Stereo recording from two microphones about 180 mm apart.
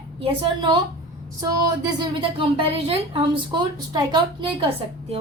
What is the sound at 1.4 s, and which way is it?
A woman's voice, 20° right (ahead or behind).